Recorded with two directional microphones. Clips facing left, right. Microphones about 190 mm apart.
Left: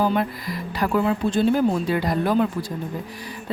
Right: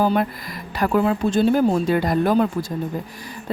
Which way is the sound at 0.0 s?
45° right (ahead or behind).